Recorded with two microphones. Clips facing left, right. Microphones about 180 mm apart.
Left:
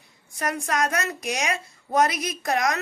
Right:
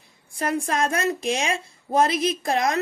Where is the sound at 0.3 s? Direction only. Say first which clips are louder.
Right 2 dB; 30° right (ahead or behind).